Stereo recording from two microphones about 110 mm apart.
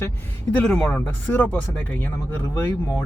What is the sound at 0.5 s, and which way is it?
Speech, 10° left (ahead or behind).